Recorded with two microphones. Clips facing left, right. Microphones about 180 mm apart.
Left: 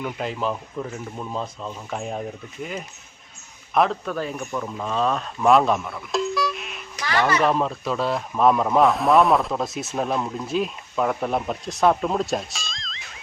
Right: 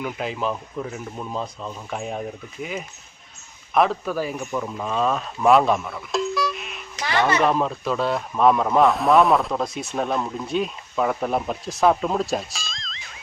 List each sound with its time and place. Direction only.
0.0 s a man's voice: centre (ahead or behind)
7.0 s speech: 25° right (ahead or behind)
7.4 s a man's voice: centre (ahead or behind)